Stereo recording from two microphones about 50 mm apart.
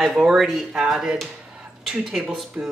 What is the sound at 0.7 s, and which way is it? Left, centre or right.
Speech, centre.